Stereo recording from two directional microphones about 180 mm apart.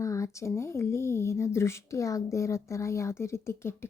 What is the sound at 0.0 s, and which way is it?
Speech, 15° left (ahead or behind).